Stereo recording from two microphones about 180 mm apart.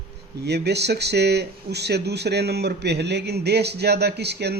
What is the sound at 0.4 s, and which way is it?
Speech, 70° right (ahead or behind).